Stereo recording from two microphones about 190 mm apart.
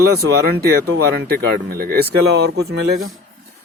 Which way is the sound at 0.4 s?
55° right (ahead or behind).